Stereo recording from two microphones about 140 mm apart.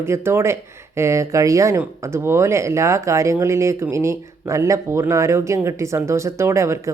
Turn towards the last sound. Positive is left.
turn(degrees=-20)  # may be behind; listen again after turning